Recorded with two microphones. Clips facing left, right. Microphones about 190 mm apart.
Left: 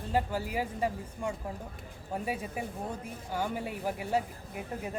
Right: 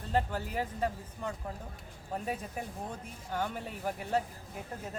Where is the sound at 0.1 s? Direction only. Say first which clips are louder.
Left 1 dB; 10° left (ahead or behind).